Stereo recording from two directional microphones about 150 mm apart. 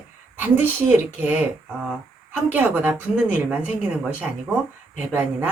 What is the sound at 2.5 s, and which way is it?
A woman's voice, 10° right (ahead or behind).